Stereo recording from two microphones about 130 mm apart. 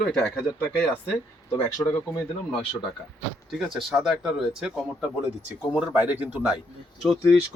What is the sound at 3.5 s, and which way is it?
Speech, centre (ahead or behind).